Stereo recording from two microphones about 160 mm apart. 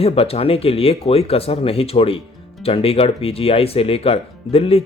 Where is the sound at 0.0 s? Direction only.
40° left (ahead or behind).